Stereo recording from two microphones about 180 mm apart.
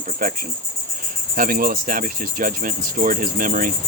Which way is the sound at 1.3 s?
50° right (ahead or behind).